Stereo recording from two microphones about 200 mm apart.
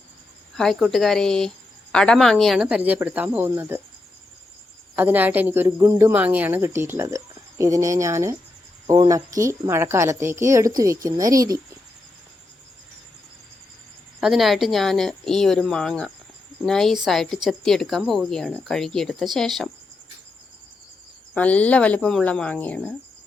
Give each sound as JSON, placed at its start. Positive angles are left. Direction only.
{"t": 0.5, "sound": "a woman's voice", "side_deg": 0}
{"t": 4.9, "sound": "a woman's voice", "side_deg": -10}
{"t": 14.2, "sound": "a woman's voice", "side_deg": 0}
{"t": 21.3, "sound": "speech", "side_deg": 5}